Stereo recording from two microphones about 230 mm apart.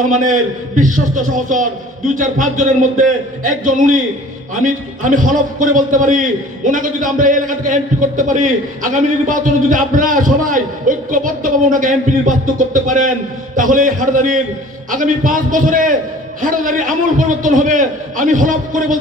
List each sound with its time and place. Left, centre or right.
0.1 s a man's voice: right